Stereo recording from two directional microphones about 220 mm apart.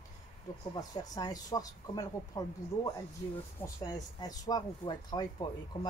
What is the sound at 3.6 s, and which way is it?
Speech, 15° left (ahead or behind).